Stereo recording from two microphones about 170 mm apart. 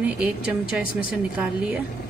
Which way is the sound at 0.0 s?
5° right (ahead or behind).